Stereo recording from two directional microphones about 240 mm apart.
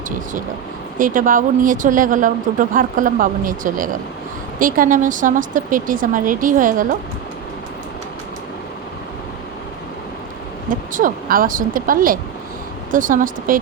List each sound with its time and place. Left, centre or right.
0.9 s speech: right
10.7 s speech: right